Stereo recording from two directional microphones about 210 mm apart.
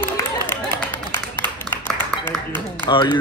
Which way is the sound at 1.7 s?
10° left (ahead or behind).